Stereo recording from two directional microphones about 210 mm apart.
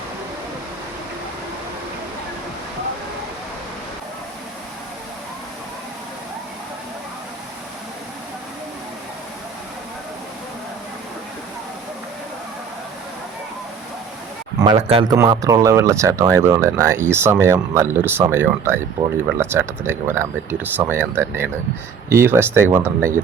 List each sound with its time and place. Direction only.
14.6 s speech: 25° right (ahead or behind)
15.1 s speech: 15° right (ahead or behind)